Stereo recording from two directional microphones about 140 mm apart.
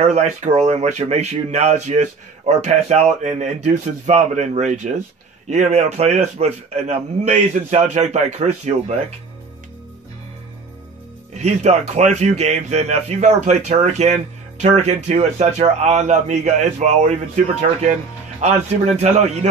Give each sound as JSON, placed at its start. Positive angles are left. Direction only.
{"t": 0.0, "sound": "speech", "side_deg": -55}
{"t": 11.3, "sound": "speech", "side_deg": -55}